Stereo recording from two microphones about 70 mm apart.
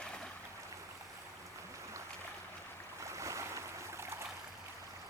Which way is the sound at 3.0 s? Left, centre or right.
Right.